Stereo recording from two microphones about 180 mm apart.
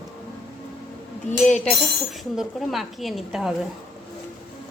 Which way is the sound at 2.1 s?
Centre (ahead or behind).